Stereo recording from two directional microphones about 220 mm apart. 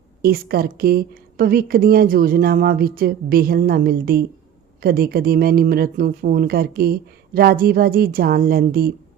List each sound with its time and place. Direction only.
0.2 s a woman's voice: 45° right (ahead or behind)